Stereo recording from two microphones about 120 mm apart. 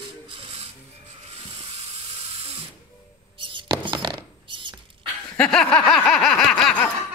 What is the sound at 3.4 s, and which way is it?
Rodents, 45° right (ahead or behind).